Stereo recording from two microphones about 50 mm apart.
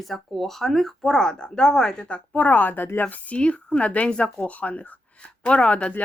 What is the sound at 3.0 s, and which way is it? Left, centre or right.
Speech, left.